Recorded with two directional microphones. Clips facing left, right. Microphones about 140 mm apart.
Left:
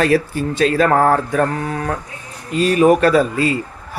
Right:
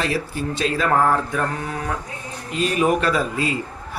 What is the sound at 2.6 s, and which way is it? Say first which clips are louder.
Speech: left 7 dB; 45° left (ahead or behind).